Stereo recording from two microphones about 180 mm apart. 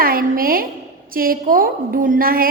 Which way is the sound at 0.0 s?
50° right (ahead or behind).